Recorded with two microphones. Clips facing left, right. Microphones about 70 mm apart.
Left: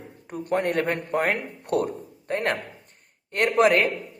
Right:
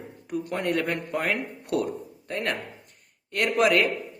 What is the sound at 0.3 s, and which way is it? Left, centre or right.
Speech, left.